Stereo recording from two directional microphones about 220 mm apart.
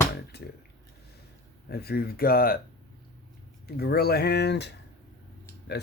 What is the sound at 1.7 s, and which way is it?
Speech, 45° left (ahead or behind).